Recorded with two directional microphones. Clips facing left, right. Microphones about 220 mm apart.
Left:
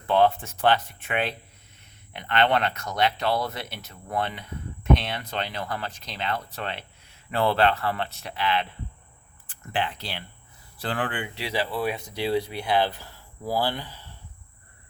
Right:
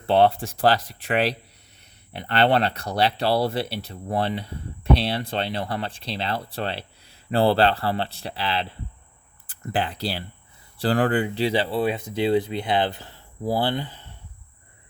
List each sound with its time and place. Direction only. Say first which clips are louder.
0.1 s speech: right 3 dB; 30° right (ahead or behind)
0.8 s speech: right 1 dB; 90° right
1.0 s speech: right 5 dB; 35° right (ahead or behind); by 14.1 s 20° right (ahead or behind)